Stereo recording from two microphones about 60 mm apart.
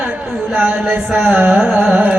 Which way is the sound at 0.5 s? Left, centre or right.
Right.